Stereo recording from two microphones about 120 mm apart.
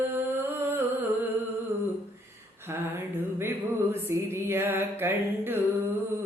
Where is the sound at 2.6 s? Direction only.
20° right (ahead or behind).